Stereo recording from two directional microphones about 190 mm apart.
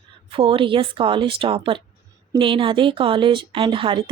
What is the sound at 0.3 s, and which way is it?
A woman's voice, 30° right (ahead or behind).